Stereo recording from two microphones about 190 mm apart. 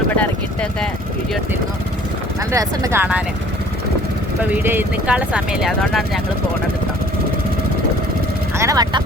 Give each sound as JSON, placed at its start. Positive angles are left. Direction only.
{"t": 0.2, "sound": "a sound", "side_deg": 5}
{"t": 2.5, "sound": "speech", "side_deg": -15}
{"t": 4.4, "sound": "speech", "side_deg": -10}
{"t": 8.5, "sound": "speech", "side_deg": -15}